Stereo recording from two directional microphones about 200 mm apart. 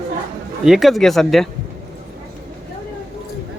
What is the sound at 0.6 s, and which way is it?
Speech, centre (ahead or behind).